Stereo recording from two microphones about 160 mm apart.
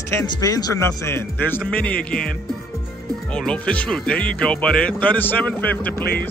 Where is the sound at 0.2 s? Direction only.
20° left (ahead or behind).